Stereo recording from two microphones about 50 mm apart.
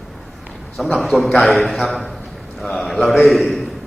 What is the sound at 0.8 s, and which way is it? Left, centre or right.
Speech, centre.